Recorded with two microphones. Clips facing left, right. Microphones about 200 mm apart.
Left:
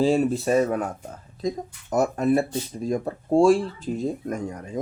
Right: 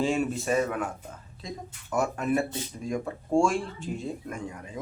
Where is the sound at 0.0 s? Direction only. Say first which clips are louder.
Left 6 dB; 35° left (ahead or behind).